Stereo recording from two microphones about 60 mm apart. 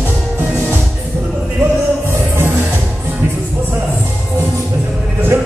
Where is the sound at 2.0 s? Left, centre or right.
Right.